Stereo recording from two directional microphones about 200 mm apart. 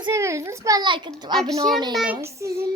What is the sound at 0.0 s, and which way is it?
A child's voice, 15° right (ahead or behind).